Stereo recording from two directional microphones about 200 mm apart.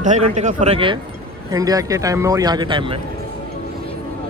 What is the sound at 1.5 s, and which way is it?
Speech, 20° right (ahead or behind).